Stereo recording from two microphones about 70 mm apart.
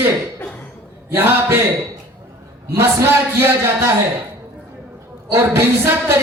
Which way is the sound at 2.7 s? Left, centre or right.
Right.